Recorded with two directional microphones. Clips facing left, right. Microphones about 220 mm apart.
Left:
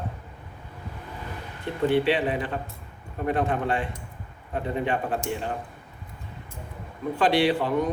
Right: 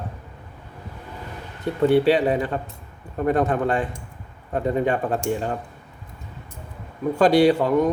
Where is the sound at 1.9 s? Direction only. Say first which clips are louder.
Right 5 dB; 40° right (ahead or behind).